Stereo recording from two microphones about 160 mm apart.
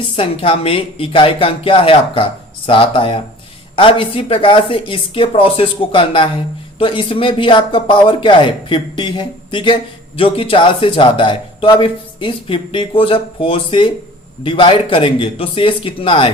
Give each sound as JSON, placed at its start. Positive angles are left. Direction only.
{"t": 0.2, "sound": "speech", "side_deg": 35}